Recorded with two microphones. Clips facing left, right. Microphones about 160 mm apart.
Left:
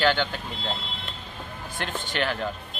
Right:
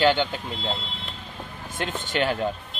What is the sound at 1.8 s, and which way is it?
Speech, 20° right (ahead or behind).